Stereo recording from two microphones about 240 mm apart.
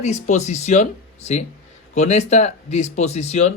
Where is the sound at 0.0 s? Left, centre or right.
Left.